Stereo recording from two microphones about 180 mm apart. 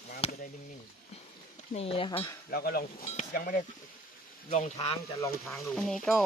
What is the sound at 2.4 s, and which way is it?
Speech, 60° left (ahead or behind).